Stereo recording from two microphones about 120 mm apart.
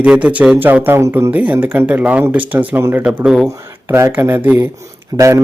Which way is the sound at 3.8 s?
20° right (ahead or behind).